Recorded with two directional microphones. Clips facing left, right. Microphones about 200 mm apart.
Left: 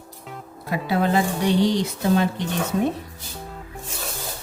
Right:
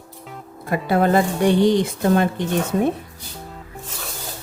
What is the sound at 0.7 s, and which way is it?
A woman's voice, 50° right (ahead or behind).